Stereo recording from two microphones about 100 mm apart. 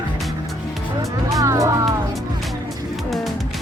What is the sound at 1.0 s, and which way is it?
Speech, 35° right (ahead or behind).